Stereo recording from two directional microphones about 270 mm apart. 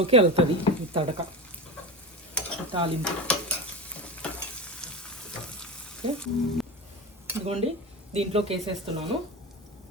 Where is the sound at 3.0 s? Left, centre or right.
Centre.